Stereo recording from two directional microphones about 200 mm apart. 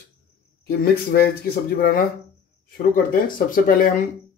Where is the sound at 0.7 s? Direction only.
50° left (ahead or behind).